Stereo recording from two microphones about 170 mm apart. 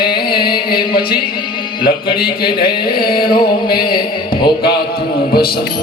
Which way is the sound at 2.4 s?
65° left (ahead or behind).